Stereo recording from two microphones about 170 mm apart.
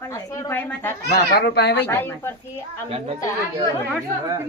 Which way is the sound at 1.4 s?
75° left (ahead or behind).